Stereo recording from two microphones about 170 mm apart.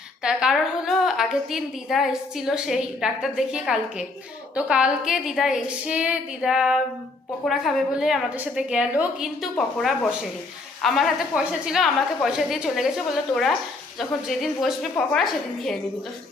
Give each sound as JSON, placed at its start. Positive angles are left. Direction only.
{"t": 0.2, "sound": "a woman's voice", "side_deg": -5}
{"t": 14.0, "sound": "a woman's voice", "side_deg": 0}